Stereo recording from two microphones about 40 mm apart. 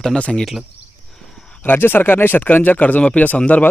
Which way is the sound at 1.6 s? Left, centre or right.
Left.